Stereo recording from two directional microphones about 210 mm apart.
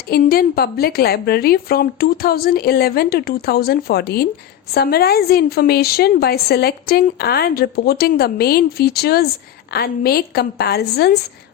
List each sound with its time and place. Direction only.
0.1 s a woman's voice: 45° left (ahead or behind)